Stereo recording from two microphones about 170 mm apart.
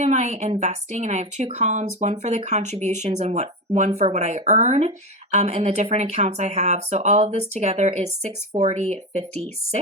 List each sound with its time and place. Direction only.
0.0 s a woman's voice: 40° right (ahead or behind)